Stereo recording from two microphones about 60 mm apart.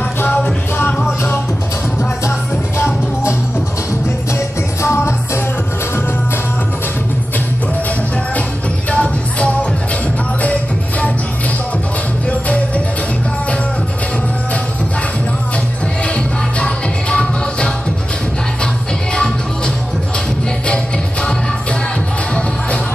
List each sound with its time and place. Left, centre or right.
4.8 s music: left
8.9 s music: centre
12.3 s music: left
16.5 s music: centre
19.1 s music: centre